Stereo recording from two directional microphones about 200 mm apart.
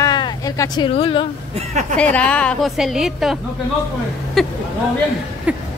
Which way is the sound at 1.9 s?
5° left (ahead or behind).